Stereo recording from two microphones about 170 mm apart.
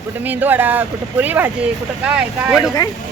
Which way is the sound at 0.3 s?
10° right (ahead or behind).